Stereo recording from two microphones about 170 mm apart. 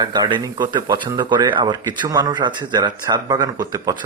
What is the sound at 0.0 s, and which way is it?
Speech, 25° right (ahead or behind).